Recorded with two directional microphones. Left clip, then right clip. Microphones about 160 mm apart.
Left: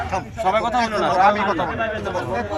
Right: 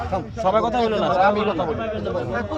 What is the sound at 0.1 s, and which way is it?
Speech, 15° right (ahead or behind).